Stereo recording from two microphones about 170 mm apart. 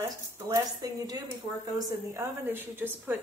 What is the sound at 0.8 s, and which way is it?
A woman's voice, 20° right (ahead or behind).